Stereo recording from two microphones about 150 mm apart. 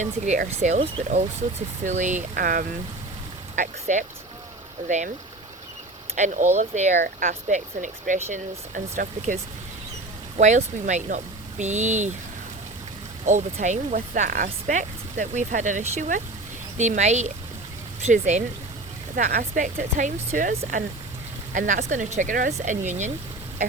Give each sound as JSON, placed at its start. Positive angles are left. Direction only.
{"t": 0.0, "sound": "speech", "side_deg": -55}
{"t": 3.5, "sound": "speech", "side_deg": -55}
{"t": 6.1, "sound": "speech", "side_deg": -55}
{"t": 13.2, "sound": "speech", "side_deg": -55}
{"t": 19.1, "sound": "speech", "side_deg": -70}